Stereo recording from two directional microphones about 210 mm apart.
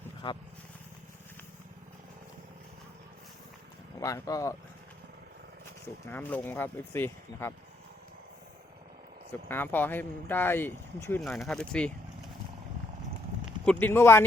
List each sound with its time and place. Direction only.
0.2 s speech: 25° left (ahead or behind)
4.0 s speech: 15° left (ahead or behind)
6.1 s speech: 10° left (ahead or behind)
9.5 s speech: 10° left (ahead or behind)
11.2 s speech: centre (ahead or behind)
13.7 s speech: 10° left (ahead or behind)